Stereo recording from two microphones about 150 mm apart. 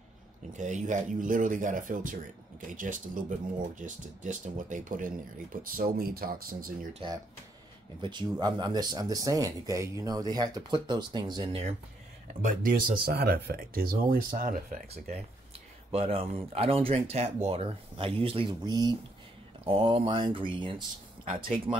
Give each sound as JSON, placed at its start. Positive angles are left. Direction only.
{"t": 0.5, "sound": "speech", "side_deg": -55}
{"t": 5.6, "sound": "speech", "side_deg": -75}
{"t": 7.0, "sound": "speech", "side_deg": -35}
{"t": 12.4, "sound": "speech", "side_deg": -60}
{"t": 12.8, "sound": "speech", "side_deg": -35}
{"t": 13.1, "sound": "speech", "side_deg": -90}
{"t": 15.9, "sound": "speech", "side_deg": -40}